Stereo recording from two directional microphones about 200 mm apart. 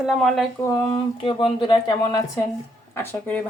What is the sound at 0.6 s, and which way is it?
A woman's voice, 15° left (ahead or behind).